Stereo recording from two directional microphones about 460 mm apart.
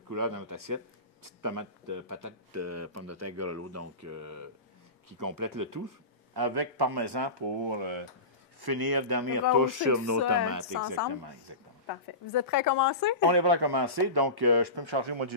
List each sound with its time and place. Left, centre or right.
0.1 s speech: right
8.5 s speech: right
11.1 s speech: right
12.3 s speech: left
13.3 s speech: right